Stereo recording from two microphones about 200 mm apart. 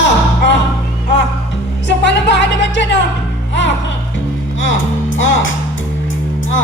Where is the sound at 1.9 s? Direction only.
60° left (ahead or behind).